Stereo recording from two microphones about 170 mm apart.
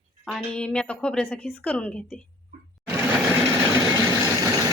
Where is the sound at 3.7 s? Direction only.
20° right (ahead or behind).